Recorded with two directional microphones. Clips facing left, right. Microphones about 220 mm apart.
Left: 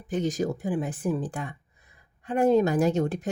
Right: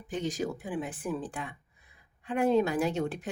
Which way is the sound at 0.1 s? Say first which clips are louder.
Left 5 dB; 45° left (ahead or behind).